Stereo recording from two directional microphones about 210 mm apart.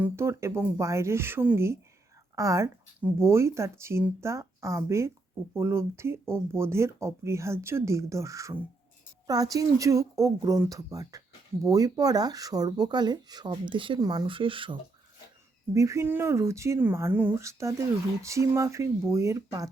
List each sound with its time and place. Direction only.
0.0 s speech: 10° right (ahead or behind)